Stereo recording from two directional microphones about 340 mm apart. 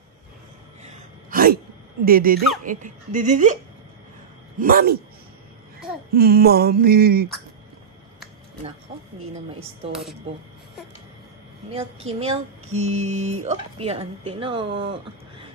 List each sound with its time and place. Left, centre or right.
0.8 s gasp: right
2.0 s mantra: right
4.6 s mantra: right
6.1 s mantra: right
9.2 s speech: centre
11.7 s speech: centre